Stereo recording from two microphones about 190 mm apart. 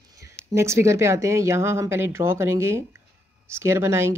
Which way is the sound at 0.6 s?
15° right (ahead or behind).